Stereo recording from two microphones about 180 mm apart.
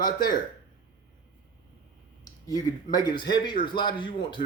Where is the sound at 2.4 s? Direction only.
20° left (ahead or behind).